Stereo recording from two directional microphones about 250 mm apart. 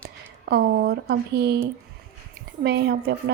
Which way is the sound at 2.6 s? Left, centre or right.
Right.